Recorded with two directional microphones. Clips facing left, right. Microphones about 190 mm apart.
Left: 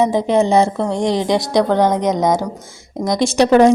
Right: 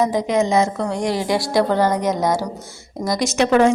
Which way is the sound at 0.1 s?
30° left (ahead or behind).